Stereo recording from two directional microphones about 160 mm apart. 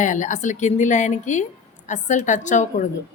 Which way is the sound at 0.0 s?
50° left (ahead or behind).